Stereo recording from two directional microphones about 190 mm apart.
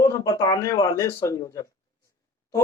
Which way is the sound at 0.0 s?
15° left (ahead or behind).